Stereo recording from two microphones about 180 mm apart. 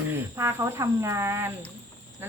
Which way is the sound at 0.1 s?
15° right (ahead or behind).